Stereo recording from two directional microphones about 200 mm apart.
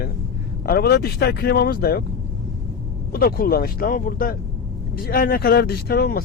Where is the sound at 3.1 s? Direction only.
50° left (ahead or behind).